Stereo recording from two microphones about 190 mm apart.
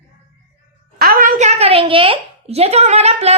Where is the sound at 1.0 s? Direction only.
50° right (ahead or behind).